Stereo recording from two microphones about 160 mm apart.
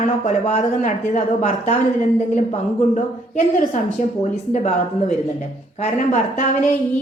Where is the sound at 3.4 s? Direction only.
50° left (ahead or behind).